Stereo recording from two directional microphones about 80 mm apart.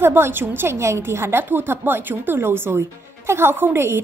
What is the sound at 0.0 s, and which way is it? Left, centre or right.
A woman's voice, right.